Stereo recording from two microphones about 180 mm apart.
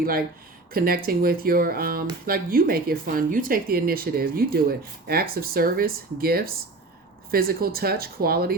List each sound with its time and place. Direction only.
0.0 s speech: 55° right (ahead or behind)